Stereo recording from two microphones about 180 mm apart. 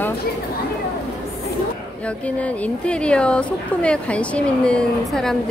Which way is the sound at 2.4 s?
5° left (ahead or behind).